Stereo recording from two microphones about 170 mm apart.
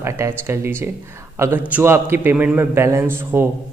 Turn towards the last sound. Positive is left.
turn(degrees=-15)  # may be behind; listen again after turning